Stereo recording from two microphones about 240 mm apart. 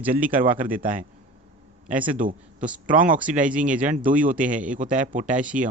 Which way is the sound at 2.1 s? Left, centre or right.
Right.